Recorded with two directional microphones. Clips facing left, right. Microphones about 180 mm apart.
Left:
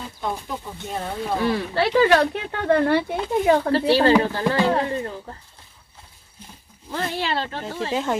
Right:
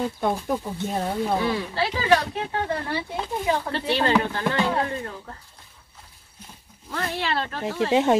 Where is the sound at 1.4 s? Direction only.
60° left (ahead or behind).